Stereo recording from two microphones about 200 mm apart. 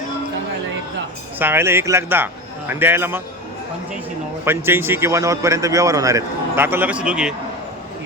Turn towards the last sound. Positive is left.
turn(degrees=-5)  # may be behind; listen again after turning